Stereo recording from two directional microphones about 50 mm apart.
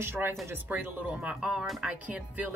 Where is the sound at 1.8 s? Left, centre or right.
Right.